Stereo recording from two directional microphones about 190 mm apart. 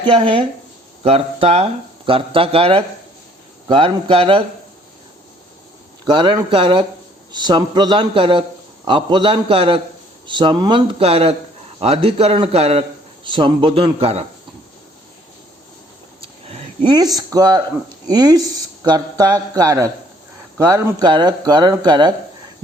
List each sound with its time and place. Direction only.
0.0 s a man's voice: 25° right (ahead or behind)
6.1 s a man's voice: 25° right (ahead or behind)
16.2 s a sound: 30° right (ahead or behind)
18.1 s a man's voice: 20° right (ahead or behind)